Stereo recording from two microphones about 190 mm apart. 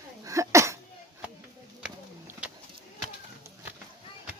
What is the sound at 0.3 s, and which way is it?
Sneeze, 15° right (ahead or behind).